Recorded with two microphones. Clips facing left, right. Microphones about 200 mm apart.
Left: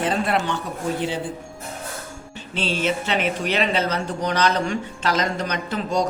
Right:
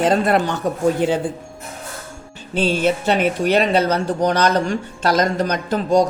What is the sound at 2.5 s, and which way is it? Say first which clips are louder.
Speech: right 6 dB; 45° right (ahead or behind).